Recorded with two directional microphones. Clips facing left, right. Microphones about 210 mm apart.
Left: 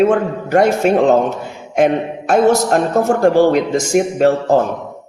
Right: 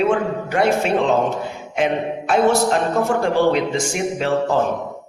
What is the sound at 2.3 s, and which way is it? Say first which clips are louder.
A man's voice: left 4 dB; 45° left (ahead or behind).